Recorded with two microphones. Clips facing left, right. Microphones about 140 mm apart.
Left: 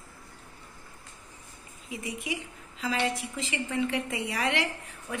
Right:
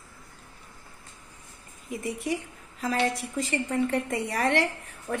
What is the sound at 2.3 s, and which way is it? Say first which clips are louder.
A woman's voice: right 5 dB; 45° right (ahead or behind).